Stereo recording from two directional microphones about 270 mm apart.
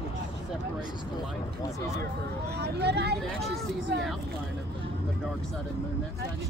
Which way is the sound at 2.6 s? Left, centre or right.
Right.